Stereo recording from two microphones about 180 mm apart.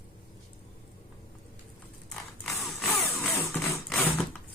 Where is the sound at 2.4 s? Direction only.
Centre (ahead or behind).